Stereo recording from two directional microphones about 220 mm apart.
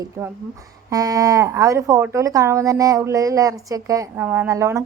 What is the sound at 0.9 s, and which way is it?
Speech, 15° right (ahead or behind).